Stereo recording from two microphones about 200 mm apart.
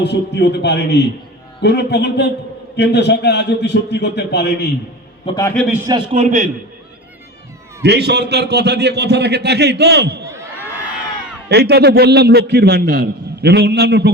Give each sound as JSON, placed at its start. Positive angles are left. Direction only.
{"t": 0.0, "sound": "a man's voice", "side_deg": 55}
{"t": 5.2, "sound": "a man's voice", "side_deg": 20}
{"t": 6.1, "sound": "a man's voice", "side_deg": -35}
{"t": 7.8, "sound": "a man's voice", "side_deg": -55}
{"t": 11.4, "sound": "a man's voice", "side_deg": -55}